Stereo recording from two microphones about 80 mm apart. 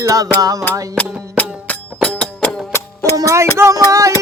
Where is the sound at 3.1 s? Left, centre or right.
Right.